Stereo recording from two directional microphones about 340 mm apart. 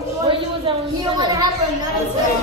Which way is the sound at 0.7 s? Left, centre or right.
Centre.